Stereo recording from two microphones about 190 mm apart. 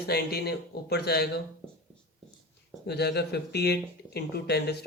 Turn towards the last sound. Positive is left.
turn(degrees=60)  # may be behind; listen again after turning